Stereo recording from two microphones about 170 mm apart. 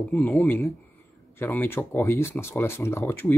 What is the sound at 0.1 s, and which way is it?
Speech, 10° left (ahead or behind).